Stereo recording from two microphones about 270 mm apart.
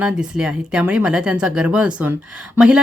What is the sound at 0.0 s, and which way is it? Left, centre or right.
Speech, centre.